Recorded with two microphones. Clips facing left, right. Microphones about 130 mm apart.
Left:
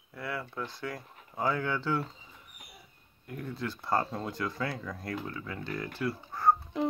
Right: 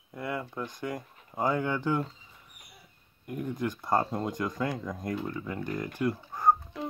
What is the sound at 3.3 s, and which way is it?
Speech, 15° right (ahead or behind).